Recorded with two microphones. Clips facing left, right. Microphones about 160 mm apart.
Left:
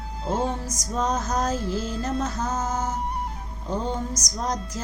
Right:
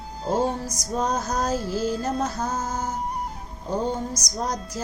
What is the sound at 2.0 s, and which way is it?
Music, 35° right (ahead or behind).